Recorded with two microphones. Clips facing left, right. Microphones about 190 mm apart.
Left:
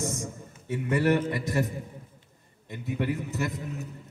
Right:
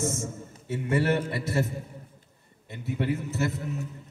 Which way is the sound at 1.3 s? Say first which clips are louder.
Even; 15° left (ahead or behind).